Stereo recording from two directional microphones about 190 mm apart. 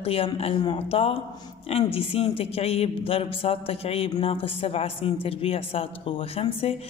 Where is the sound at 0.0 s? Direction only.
30° left (ahead or behind).